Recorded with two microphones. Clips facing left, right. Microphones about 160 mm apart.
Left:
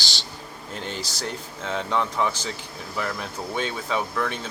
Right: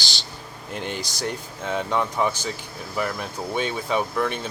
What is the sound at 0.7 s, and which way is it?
Speech, 15° right (ahead or behind).